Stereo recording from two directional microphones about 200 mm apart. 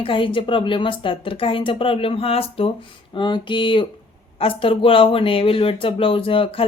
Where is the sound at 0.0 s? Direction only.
25° left (ahead or behind).